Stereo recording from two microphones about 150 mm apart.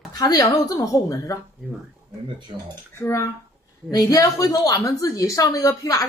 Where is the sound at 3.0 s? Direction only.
20° left (ahead or behind).